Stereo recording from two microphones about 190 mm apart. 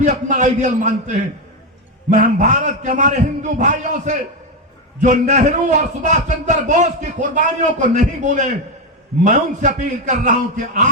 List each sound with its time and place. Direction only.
0.0 s a man's voice: 40° right (ahead or behind)